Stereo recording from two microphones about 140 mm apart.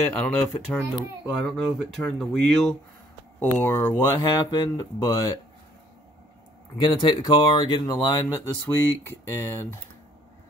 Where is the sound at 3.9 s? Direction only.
30° left (ahead or behind).